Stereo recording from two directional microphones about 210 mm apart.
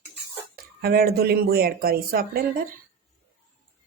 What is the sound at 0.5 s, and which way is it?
Speech, 45° right (ahead or behind).